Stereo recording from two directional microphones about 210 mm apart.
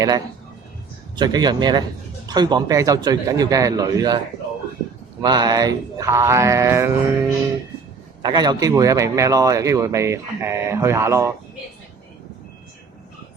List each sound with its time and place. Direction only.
1.1 s a man's voice: 20° right (ahead or behind)
5.2 s a man's voice: 20° right (ahead or behind)